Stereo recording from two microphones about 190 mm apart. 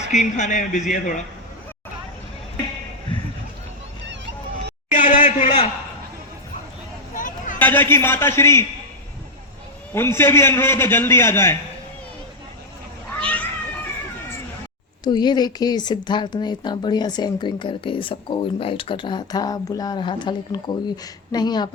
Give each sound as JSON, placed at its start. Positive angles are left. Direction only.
{"t": 0.0, "sound": "a man's voice", "side_deg": 40}
{"t": 4.9, "sound": "a sound", "side_deg": 40}
{"t": 7.1, "sound": "hubbub", "side_deg": 45}
{"t": 7.6, "sound": "a man's voice", "side_deg": 10}
{"t": 9.9, "sound": "a man's voice", "side_deg": 10}
{"t": 13.1, "sound": "cat", "side_deg": 5}
{"t": 15.0, "sound": "speech", "side_deg": 20}